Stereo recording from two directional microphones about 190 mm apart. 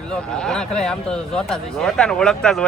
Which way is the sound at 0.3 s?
5° left (ahead or behind).